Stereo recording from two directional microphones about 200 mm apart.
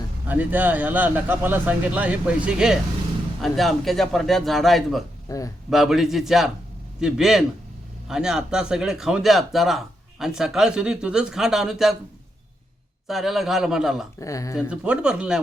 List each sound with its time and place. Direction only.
0.3 s speech: 10° right (ahead or behind)
5.3 s speech: 15° left (ahead or behind)
5.7 s speech: centre (ahead or behind)
13.1 s speech: centre (ahead or behind)
14.2 s speech: 15° left (ahead or behind)
14.7 s speech: 5° right (ahead or behind)